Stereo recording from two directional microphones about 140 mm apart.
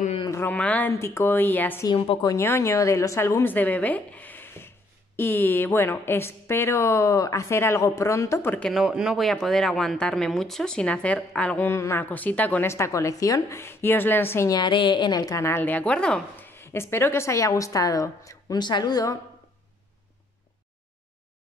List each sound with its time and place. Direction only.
0.3 s a woman's voice: 15° left (ahead or behind)
8.7 s speech: 5° right (ahead or behind)
11.7 s a woman's voice: 20° left (ahead or behind)
14.6 s a woman's voice: 35° left (ahead or behind); by 16.5 s 5° left (ahead or behind)
16.5 s a woman's voice: 15° left (ahead or behind)